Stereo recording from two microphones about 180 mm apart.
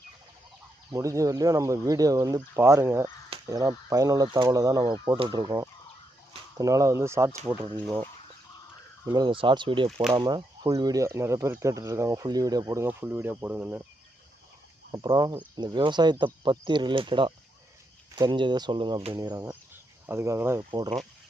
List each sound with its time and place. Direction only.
0.9 s speech: 20° right (ahead or behind)
9.0 s speech: 25° right (ahead or behind)
14.9 s speech: 25° right (ahead or behind)
19.5 s cricket: 10° right (ahead or behind)
20.7 s speech: 25° right (ahead or behind)